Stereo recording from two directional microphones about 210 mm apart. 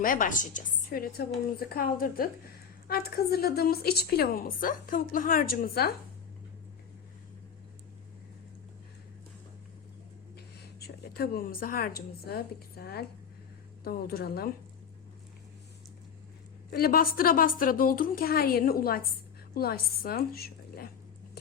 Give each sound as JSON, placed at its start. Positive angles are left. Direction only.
{"t": 0.0, "sound": "a woman's voice", "side_deg": 40}
{"t": 10.8, "sound": "a woman's voice", "side_deg": 50}
{"t": 16.7, "sound": "a woman's voice", "side_deg": 45}